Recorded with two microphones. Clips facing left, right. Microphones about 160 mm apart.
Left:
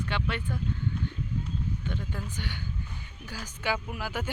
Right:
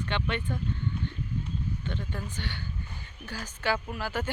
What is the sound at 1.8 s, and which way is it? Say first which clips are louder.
Speech: even; 10° left (ahead or behind).